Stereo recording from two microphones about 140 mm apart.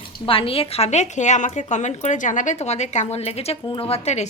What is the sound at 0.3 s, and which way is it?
A woman's voice, 40° left (ahead or behind).